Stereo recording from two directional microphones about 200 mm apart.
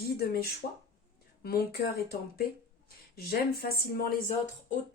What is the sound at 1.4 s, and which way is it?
Speech, 50° left (ahead or behind).